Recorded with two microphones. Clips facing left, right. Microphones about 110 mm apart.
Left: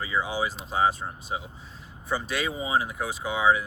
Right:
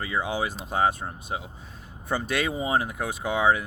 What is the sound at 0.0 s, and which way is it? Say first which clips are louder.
Speech: even; 55° right (ahead or behind).